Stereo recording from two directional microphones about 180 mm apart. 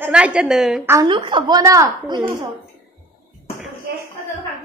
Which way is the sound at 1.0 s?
25° right (ahead or behind).